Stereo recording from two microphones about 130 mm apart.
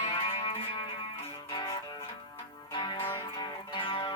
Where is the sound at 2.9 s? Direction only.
15° left (ahead or behind).